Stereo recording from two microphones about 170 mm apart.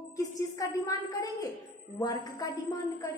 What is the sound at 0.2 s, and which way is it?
A woman's voice, 20° left (ahead or behind).